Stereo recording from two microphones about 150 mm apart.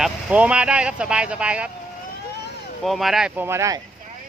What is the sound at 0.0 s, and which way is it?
Speech, 10° right (ahead or behind).